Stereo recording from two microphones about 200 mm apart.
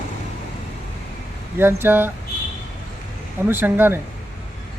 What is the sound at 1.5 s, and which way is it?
Speech, 10° right (ahead or behind).